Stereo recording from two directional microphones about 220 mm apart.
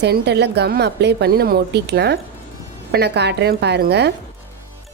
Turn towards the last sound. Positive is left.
turn(degrees=-50)  # may be behind; listen again after turning